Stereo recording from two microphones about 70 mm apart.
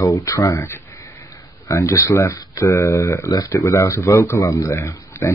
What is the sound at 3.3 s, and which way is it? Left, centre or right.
Speech, left.